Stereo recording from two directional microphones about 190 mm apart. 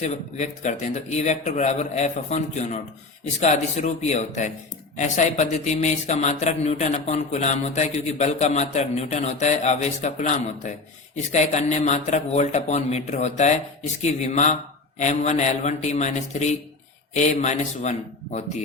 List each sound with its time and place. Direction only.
0.0 s speech: 40° left (ahead or behind)